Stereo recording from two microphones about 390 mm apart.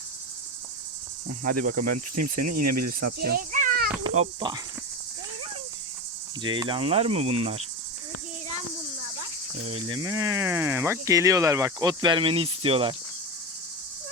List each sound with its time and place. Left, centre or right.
1.6 s cricket: right
1.9 s cricket: right
3.2 s snake: right
4.0 s insect: centre
6.4 s speech: centre
9.6 s speech: centre